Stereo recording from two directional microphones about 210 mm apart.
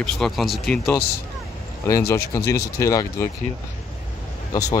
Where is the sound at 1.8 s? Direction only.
15° left (ahead or behind).